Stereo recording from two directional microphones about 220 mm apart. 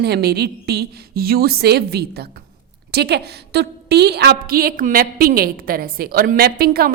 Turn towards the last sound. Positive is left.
turn(degrees=-45)  # may be behind; listen again after turning